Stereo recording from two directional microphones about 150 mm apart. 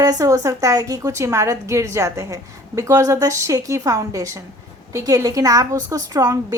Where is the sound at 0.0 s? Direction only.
25° right (ahead or behind).